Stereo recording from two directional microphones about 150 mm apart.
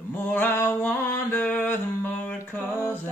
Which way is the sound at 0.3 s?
15° left (ahead or behind).